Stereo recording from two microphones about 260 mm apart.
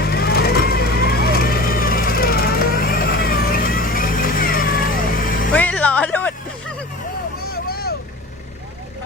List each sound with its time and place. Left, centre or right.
0.0 s vehicle: left
5.5 s music: centre
7.5 s vehicle: left